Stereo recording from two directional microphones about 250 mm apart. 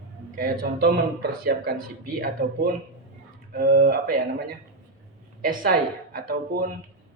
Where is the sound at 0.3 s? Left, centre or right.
Right.